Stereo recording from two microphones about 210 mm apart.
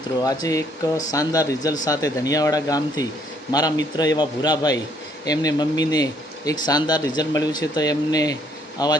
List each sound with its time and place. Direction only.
0.2 s a man's voice: 15° left (ahead or behind)